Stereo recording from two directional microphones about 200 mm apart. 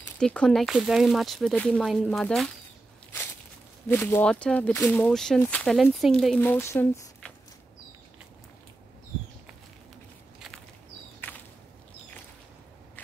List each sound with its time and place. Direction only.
0.0 s speech: 5° left (ahead or behind)
3.8 s speech: 10° left (ahead or behind)
11.1 s a sound: 10° left (ahead or behind)